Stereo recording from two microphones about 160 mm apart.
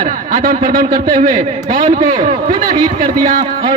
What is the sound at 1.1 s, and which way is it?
A man's voice, 50° right (ahead or behind).